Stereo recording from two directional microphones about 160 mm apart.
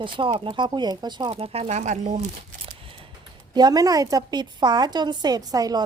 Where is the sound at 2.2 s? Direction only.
35° right (ahead or behind).